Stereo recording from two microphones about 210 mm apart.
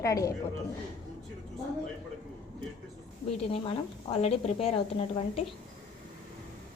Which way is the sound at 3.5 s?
25° left (ahead or behind).